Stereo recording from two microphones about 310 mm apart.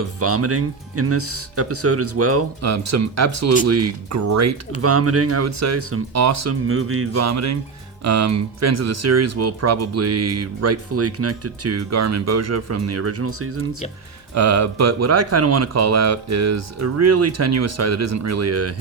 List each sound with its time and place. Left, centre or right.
0.2 s speech: right
4.8 s speech: right
14.3 s speech: right